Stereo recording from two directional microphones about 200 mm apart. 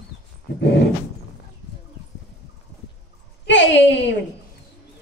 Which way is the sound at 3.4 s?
65° left (ahead or behind).